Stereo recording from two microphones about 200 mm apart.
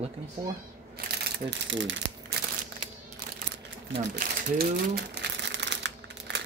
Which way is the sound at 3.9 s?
50° right (ahead or behind).